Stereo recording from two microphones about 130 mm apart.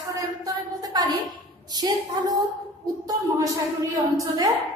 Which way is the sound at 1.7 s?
30° right (ahead or behind).